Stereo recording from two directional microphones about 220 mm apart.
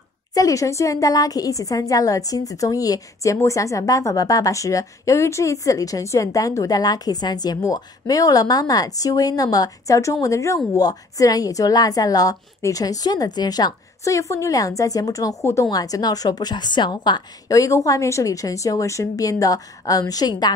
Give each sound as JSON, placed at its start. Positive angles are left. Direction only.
{"t": 0.3, "sound": "a woman's voice", "side_deg": 15}